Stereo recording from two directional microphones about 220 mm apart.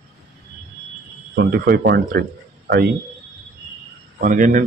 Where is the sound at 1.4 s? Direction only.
45° right (ahead or behind).